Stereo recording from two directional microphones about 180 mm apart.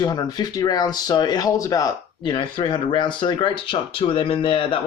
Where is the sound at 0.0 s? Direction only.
20° left (ahead or behind).